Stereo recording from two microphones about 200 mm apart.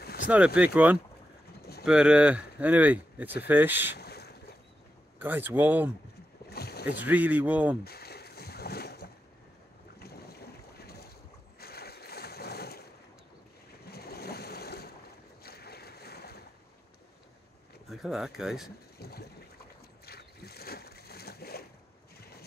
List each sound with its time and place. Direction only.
0.0 s vehicle: 50° left (ahead or behind)
0.6 s speech: 10° right (ahead or behind)
3.9 s boat: 55° left (ahead or behind)
5.2 s speech: 10° right (ahead or behind)
6.5 s boat: 50° left (ahead or behind)
7.1 s speech: 10° right (ahead or behind)
7.8 s boat: 50° left (ahead or behind)
11.6 s a sound: 50° left (ahead or behind)
13.8 s boat: 50° left (ahead or behind)
17.8 s speech: centre (ahead or behind)
18.9 s a sound: 50° left (ahead or behind)